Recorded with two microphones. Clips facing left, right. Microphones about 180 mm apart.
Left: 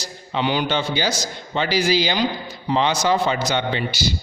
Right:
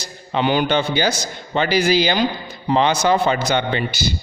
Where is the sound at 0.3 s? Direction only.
50° right (ahead or behind).